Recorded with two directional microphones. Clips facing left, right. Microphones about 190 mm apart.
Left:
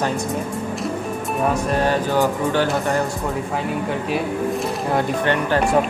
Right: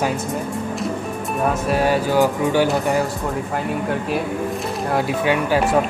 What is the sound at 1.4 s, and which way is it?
Music, 10° right (ahead or behind).